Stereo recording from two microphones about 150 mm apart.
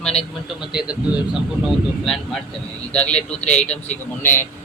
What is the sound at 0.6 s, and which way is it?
A man's voice, 5° right (ahead or behind).